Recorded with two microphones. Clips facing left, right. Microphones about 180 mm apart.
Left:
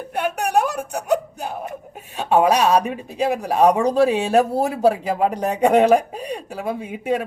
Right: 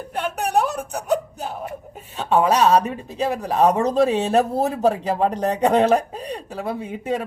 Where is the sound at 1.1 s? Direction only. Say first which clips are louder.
Left 1 dB; 60° left (ahead or behind).